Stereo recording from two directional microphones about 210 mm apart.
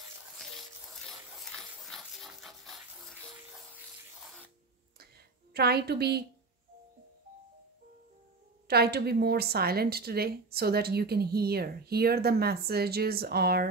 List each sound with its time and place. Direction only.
1.9 s wood: centre (ahead or behind)
5.5 s a woman's voice: 50° right (ahead or behind)
8.6 s a woman's voice: 50° right (ahead or behind)